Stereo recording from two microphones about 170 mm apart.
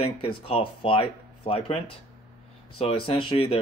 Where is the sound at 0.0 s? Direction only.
30° left (ahead or behind).